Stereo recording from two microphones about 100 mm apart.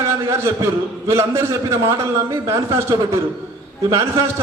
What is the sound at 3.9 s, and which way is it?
Speech, 30° right (ahead or behind).